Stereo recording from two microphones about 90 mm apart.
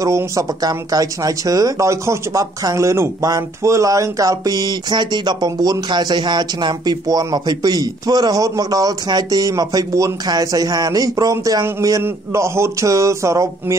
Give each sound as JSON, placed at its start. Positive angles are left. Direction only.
{"t": 0.0, "sound": "speech", "side_deg": -40}
{"t": 12.0, "sound": "speech", "side_deg": -30}